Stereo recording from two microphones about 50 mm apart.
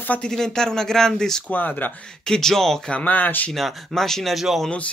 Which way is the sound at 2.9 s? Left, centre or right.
Left.